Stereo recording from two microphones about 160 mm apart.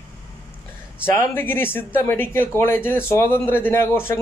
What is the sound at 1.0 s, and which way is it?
Speech, 15° left (ahead or behind).